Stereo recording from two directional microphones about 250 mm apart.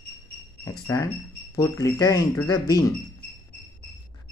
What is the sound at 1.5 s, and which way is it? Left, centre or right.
Speech, centre.